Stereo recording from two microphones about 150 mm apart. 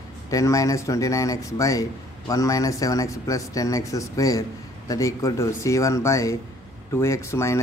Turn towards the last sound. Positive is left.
turn(degrees=20)  # may be behind; listen again after turning